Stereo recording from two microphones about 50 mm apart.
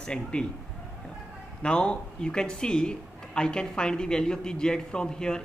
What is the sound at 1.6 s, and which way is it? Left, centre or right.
Speech, centre.